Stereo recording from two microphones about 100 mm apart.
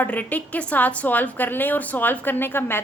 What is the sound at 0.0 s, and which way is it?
A woman's voice, 15° left (ahead or behind).